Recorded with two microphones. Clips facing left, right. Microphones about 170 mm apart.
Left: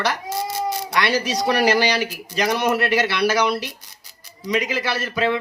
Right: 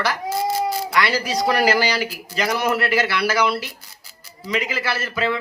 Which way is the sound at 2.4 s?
20° left (ahead or behind).